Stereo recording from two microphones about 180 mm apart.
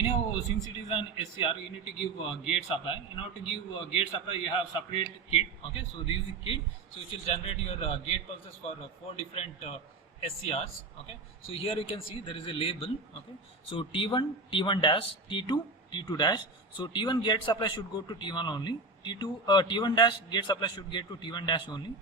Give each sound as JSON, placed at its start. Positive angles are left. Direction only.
{"t": 0.9, "sound": "a man's voice", "side_deg": 30}